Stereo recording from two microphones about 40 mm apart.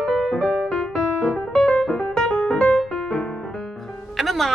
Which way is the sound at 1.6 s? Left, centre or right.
Centre.